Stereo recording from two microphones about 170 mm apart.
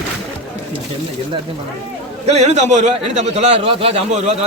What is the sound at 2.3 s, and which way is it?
A man's voice, 40° right (ahead or behind).